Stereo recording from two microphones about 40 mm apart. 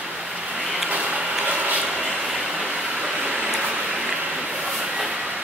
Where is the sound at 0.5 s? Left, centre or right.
Centre.